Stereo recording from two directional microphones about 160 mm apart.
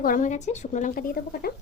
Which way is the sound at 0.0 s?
55° left (ahead or behind).